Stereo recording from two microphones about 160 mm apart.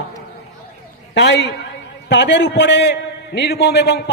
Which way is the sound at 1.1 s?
90° left.